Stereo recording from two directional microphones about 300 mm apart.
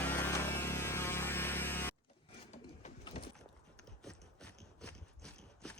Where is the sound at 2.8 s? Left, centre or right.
Left.